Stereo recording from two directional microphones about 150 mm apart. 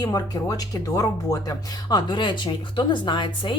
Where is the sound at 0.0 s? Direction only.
25° left (ahead or behind).